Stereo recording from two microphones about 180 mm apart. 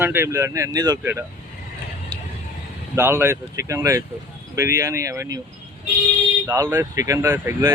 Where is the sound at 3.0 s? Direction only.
15° right (ahead or behind).